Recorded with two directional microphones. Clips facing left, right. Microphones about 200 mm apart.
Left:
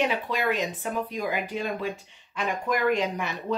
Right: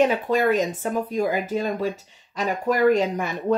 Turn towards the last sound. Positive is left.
turn(degrees=-45)  # may be behind; listen again after turning